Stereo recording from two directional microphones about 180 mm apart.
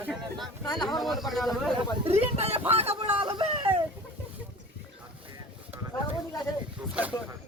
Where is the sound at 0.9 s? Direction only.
Centre (ahead or behind).